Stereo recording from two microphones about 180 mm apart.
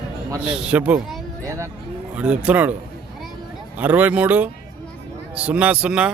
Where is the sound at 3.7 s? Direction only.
10° right (ahead or behind).